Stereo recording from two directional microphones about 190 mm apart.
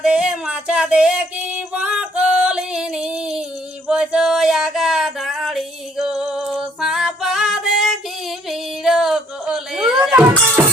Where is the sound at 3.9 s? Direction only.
5° right (ahead or behind).